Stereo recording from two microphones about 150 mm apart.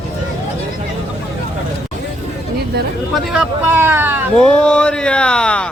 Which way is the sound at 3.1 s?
5° right (ahead or behind).